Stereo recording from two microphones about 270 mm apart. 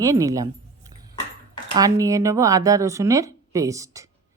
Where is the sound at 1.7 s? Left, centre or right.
Centre.